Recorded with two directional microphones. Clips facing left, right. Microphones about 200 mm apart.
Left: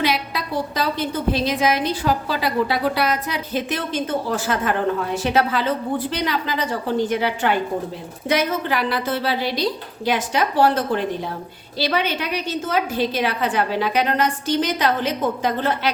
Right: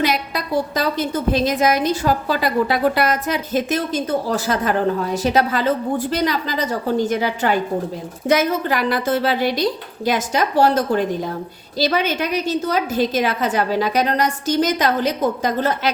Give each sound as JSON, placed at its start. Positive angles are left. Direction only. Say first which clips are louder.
{"t": 0.0, "sound": "a woman's voice", "louder": "right 2 dB", "side_deg": -45}